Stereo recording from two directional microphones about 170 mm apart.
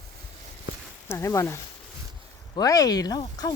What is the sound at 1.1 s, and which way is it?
Speech, 15° left (ahead or behind).